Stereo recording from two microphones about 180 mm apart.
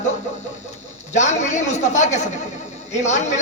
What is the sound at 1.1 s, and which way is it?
A man's voice, 40° left (ahead or behind).